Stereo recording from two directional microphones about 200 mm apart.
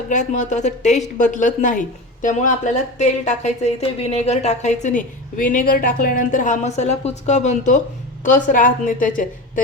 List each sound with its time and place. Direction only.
0.1 s speech: 35° left (ahead or behind)